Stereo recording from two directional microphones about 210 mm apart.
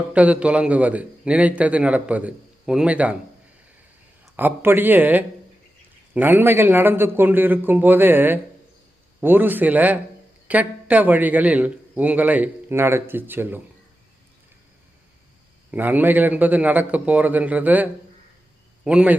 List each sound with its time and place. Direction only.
0.1 s a man's voice: 5° right (ahead or behind)
4.4 s a man's voice: 10° right (ahead or behind)
15.7 s a man's voice: 10° right (ahead or behind)
18.9 s speech: 5° right (ahead or behind)